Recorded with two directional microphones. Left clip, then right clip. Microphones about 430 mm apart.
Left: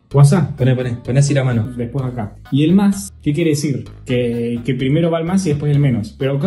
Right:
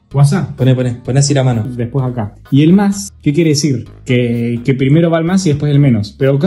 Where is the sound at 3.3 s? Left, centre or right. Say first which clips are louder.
Right 4 dB; centre.